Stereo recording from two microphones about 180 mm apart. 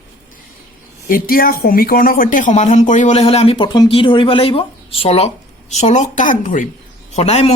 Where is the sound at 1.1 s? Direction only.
55° left (ahead or behind).